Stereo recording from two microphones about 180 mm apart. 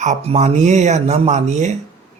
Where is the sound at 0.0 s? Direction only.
40° right (ahead or behind).